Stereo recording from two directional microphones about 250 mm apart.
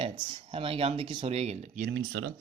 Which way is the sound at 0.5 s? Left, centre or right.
Right.